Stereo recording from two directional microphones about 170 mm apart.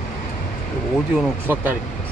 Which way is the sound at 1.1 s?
10° right (ahead or behind).